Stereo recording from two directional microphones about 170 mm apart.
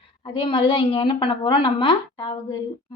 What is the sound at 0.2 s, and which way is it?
A woman's voice, 30° left (ahead or behind).